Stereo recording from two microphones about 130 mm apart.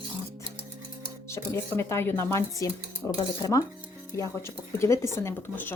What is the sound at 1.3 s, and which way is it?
Speech, 20° left (ahead or behind).